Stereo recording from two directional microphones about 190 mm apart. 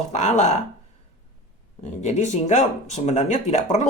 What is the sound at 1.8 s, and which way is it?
Speech, 35° left (ahead or behind).